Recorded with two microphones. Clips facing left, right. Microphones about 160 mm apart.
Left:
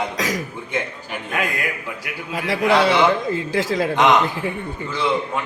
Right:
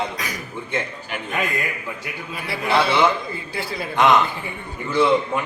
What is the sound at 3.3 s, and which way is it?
Speech, 90° left.